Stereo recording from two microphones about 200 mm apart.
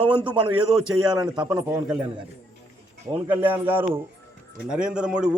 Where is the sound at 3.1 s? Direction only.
10° right (ahead or behind).